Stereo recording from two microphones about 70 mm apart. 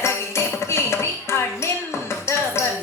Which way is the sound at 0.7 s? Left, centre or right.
Left.